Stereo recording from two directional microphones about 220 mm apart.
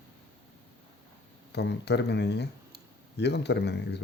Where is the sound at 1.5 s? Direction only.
50° left (ahead or behind).